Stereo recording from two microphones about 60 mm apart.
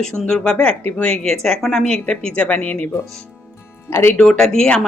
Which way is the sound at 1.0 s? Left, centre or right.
Centre.